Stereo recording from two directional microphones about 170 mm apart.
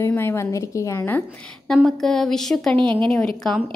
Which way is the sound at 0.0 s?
15° left (ahead or behind).